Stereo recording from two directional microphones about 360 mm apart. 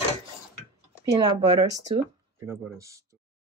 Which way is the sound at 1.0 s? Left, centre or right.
Centre.